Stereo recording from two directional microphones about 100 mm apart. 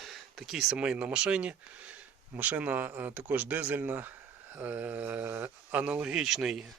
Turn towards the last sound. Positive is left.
turn(degrees=-5)  # may be behind; listen again after turning